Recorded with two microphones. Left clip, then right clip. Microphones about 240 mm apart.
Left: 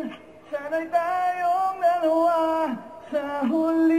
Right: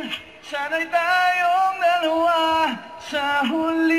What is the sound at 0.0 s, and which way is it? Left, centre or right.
Music, centre.